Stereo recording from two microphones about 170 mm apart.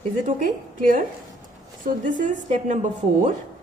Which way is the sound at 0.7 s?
50° right (ahead or behind).